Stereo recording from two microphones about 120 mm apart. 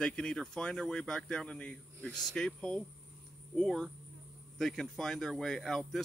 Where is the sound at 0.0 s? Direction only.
5° left (ahead or behind).